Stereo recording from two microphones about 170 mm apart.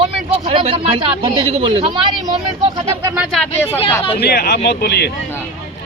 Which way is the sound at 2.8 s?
20° right (ahead or behind).